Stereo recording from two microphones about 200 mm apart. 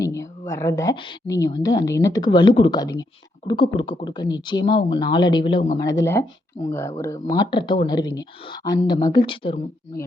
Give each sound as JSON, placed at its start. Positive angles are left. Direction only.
{"t": 0.0, "sound": "a woman's voice", "side_deg": 15}